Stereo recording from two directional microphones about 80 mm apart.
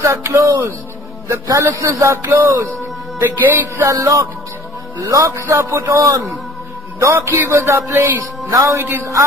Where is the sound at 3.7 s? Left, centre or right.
Right.